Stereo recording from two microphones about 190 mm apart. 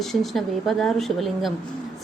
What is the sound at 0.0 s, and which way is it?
A woman's voice, centre (ahead or behind).